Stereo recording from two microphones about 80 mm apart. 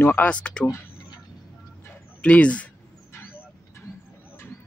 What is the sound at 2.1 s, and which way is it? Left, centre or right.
Speech, centre.